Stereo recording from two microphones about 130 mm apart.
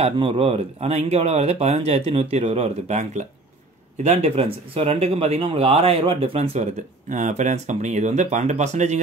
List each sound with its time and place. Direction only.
0.0 s speech: 45° right (ahead or behind); by 9.0 s 65° right (ahead or behind)